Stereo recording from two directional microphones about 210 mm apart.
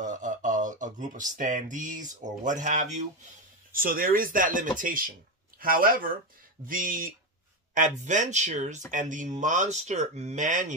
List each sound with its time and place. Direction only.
0.0 s speech: 35° right (ahead or behind)